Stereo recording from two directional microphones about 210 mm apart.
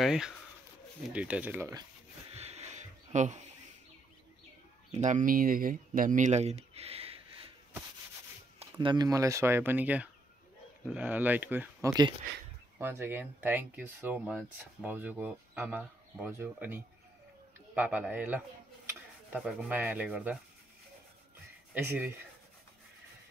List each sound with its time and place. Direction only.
0.0 s speech: 5° right (ahead or behind)
2.3 s a sound: 30° right (ahead or behind)
5.0 s speech: 40° right (ahead or behind)
8.5 s speech: 20° right (ahead or behind); by 20.3 s 5° right (ahead or behind)
21.7 s speech: 10° right (ahead or behind)